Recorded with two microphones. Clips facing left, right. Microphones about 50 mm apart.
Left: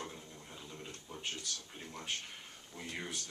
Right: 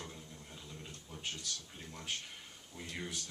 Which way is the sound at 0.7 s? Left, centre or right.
Centre.